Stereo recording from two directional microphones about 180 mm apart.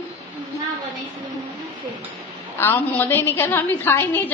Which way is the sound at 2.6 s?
10° left (ahead or behind).